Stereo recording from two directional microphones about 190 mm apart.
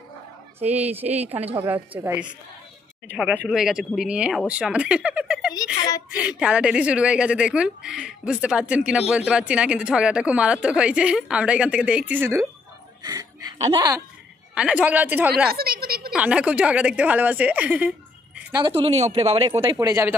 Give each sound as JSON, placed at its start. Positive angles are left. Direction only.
{"t": 0.6, "sound": "speech", "side_deg": -35}
{"t": 0.9, "sound": "speech", "side_deg": -10}
{"t": 3.4, "sound": "speech", "side_deg": -5}
{"t": 5.8, "sound": "a sound", "side_deg": 20}
{"t": 6.1, "sound": "speech", "side_deg": -5}
{"t": 14.5, "sound": "speech", "side_deg": -5}
{"t": 15.4, "sound": "a woman's voice", "side_deg": -55}
{"t": 16.1, "sound": "a woman's voice", "side_deg": -5}
{"t": 18.6, "sound": "speech", "side_deg": -30}